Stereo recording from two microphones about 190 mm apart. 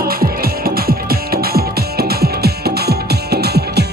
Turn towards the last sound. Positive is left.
turn(degrees=-60)  # may be behind; listen again after turning